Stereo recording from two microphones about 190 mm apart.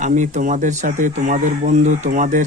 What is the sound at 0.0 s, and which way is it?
Speech, 40° right (ahead or behind).